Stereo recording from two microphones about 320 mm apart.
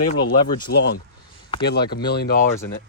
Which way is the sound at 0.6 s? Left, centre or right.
Left.